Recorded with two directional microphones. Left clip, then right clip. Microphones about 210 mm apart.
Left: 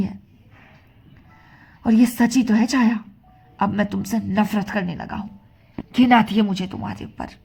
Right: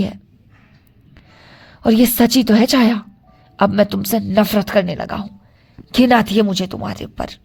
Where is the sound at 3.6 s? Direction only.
60° right (ahead or behind); by 5.2 s 75° right (ahead or behind).